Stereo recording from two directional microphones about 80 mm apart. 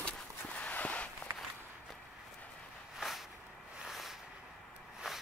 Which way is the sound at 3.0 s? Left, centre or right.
Centre.